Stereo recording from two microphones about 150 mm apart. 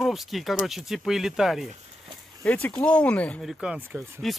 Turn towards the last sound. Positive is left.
turn(degrees=0)  # may be behind; listen again after turning